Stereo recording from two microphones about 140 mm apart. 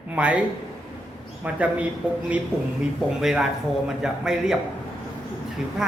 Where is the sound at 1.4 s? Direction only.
10° right (ahead or behind).